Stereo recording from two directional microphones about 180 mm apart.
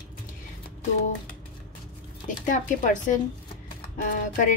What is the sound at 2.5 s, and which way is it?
Speech, 45° left (ahead or behind).